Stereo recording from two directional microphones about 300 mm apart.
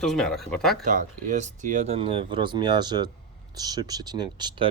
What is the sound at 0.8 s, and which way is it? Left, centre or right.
Speech, right.